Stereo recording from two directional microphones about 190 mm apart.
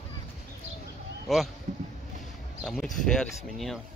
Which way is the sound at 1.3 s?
Centre (ahead or behind).